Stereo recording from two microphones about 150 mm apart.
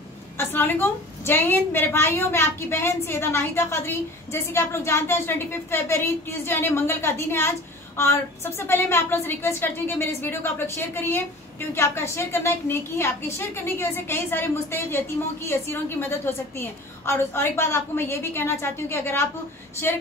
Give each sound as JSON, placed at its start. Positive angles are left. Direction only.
{"t": 0.4, "sound": "a woman's voice", "side_deg": 15}